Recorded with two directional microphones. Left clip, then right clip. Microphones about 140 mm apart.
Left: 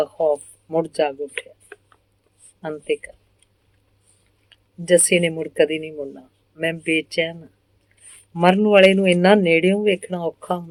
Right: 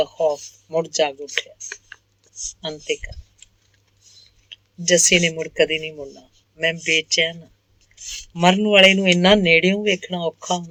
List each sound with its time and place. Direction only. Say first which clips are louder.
0.0 s speech: even; 45° right (ahead or behind)
1.4 s speech: right 6 dB; 55° right (ahead or behind)
2.6 s speech: left 2 dB; 45° right (ahead or behind)